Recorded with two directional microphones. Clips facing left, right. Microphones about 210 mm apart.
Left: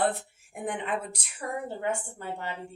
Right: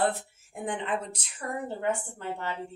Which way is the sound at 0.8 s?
10° left (ahead or behind).